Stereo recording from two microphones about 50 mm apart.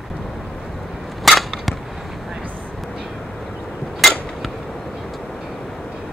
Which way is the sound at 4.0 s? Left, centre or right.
Centre.